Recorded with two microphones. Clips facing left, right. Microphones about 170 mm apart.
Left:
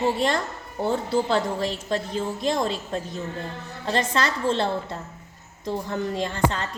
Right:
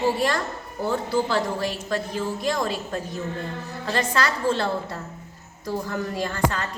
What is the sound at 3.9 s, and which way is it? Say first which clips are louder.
A woman's voice: even; 25° left (ahead or behind).